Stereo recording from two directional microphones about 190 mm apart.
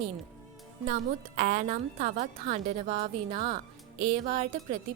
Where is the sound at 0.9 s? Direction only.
40° right (ahead or behind).